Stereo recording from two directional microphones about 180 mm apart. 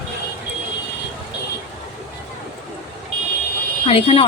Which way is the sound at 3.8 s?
35° left (ahead or behind).